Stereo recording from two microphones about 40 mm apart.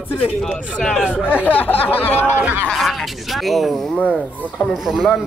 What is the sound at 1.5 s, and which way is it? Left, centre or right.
Speech, left.